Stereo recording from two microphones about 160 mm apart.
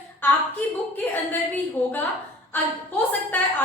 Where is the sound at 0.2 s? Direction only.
10° left (ahead or behind).